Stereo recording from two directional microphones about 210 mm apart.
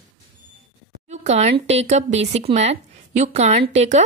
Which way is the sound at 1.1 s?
30° right (ahead or behind).